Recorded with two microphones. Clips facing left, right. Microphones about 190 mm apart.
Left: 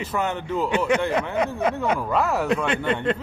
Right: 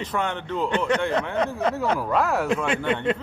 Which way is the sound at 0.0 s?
5° left (ahead or behind).